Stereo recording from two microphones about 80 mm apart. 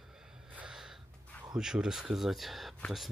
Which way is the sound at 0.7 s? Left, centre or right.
Centre.